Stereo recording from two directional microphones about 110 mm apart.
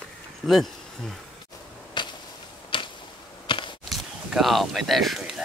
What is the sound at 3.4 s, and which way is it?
Walk, 50° left (ahead or behind).